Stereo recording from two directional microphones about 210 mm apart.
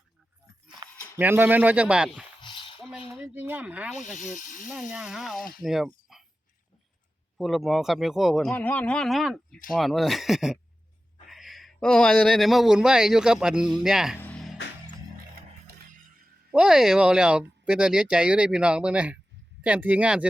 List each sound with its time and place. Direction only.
1.1 s speech: 10° right (ahead or behind)
2.4 s a sound: 25° left (ahead or behind)
3.1 s speech: 10° right (ahead or behind)
4.2 s speech: 35° left (ahead or behind)
4.7 s a man's voice: 5° right (ahead or behind)
7.3 s a man's voice: centre (ahead or behind)
14.2 s music: 5° left (ahead or behind)
15.6 s music: 40° right (ahead or behind)
16.5 s a man's voice: 5° right (ahead or behind)